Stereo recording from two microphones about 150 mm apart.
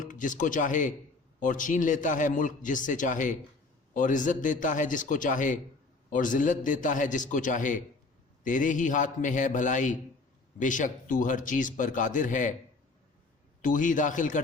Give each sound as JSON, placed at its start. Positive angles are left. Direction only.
{"t": 0.0, "sound": "a man's voice", "side_deg": 60}
{"t": 13.6, "sound": "a man's voice", "side_deg": 60}